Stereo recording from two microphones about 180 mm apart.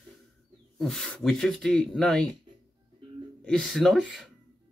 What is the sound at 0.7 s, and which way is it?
Speech, 5° left (ahead or behind).